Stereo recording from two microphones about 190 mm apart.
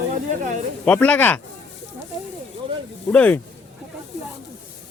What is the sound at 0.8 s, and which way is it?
Speech, 5° left (ahead or behind).